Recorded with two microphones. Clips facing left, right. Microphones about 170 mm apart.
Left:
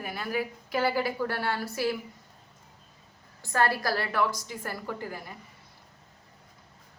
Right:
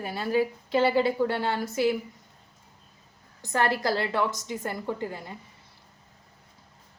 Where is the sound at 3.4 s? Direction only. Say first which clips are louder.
Right 1 dB; 20° right (ahead or behind).